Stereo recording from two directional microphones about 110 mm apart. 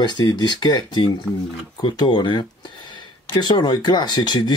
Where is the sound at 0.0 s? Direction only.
40° left (ahead or behind).